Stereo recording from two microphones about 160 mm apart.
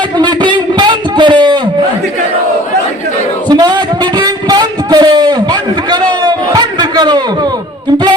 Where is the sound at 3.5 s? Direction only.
25° right (ahead or behind).